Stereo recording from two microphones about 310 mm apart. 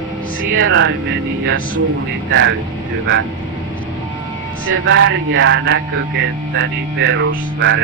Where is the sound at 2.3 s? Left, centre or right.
Right.